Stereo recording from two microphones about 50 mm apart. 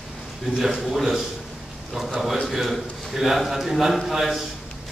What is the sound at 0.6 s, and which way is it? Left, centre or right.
Speech, centre.